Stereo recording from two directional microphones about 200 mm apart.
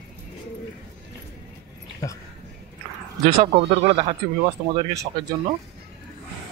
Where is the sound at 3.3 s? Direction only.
30° right (ahead or behind).